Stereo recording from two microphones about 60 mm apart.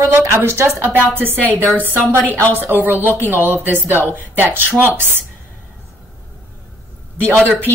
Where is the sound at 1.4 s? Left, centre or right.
Left.